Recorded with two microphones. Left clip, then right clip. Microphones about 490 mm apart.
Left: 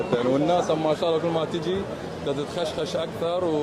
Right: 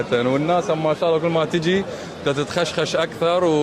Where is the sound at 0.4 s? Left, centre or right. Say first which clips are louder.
Right 3 dB; right.